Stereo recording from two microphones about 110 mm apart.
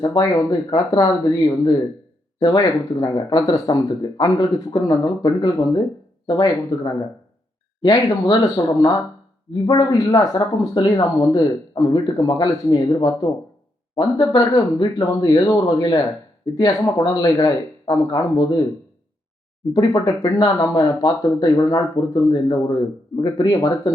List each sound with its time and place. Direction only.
0.0 s speech: 35° left (ahead or behind)
10.4 s speech: 45° left (ahead or behind)
10.8 s speech: 35° left (ahead or behind)
19.7 s speech: 40° left (ahead or behind)
20.2 s speech: 30° left (ahead or behind)